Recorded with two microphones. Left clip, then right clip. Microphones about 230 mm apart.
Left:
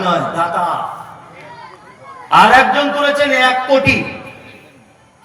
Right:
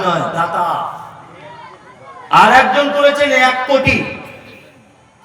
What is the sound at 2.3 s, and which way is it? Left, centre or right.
A man's voice, left.